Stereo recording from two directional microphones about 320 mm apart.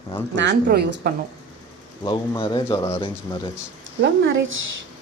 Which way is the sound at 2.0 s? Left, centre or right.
Centre.